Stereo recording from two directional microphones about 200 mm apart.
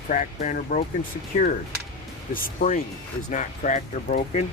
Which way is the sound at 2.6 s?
45° left (ahead or behind).